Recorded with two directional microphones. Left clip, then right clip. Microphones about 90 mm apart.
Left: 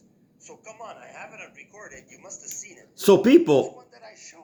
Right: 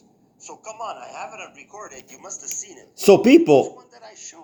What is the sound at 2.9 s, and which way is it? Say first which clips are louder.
Speech: right 3 dB; 15° right (ahead or behind).